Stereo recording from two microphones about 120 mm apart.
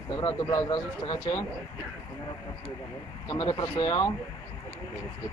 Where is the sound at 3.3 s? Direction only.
40° left (ahead or behind).